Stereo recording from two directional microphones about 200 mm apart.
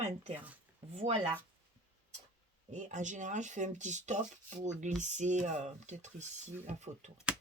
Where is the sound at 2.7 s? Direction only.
35° right (ahead or behind).